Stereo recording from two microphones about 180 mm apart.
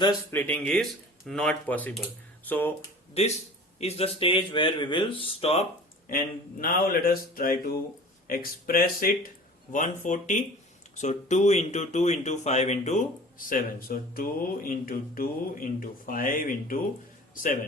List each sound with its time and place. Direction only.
0.0 s speech: 15° left (ahead or behind)
3.2 s speech: 35° left (ahead or behind)
6.1 s speech: 50° left (ahead or behind)
13.5 s a man's voice: 55° left (ahead or behind)